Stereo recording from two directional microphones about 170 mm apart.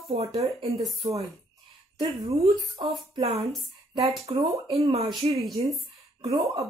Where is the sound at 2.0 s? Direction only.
35° right (ahead or behind).